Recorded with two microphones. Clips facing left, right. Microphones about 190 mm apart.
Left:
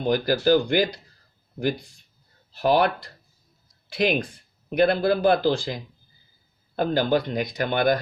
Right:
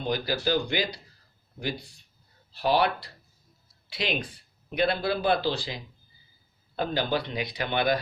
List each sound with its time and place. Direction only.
0.0 s speech: 50° left (ahead or behind)
2.5 s speech: 50° left (ahead or behind)